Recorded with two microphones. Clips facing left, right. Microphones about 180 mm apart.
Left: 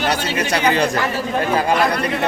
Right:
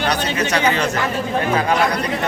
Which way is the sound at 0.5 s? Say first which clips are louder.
Left 2 dB; 35° left (ahead or behind).